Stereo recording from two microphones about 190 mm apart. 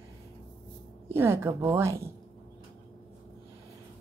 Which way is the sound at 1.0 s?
10° right (ahead or behind).